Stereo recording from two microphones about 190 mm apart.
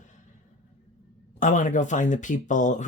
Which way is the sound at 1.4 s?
40° left (ahead or behind).